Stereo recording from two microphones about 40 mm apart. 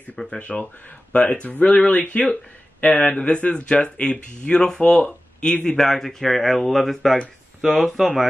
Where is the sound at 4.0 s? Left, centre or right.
Left.